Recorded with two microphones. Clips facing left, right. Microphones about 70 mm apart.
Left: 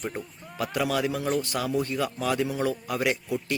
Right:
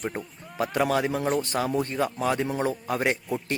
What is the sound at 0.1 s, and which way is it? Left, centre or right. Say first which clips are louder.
A man's voice: right 1 dB; right.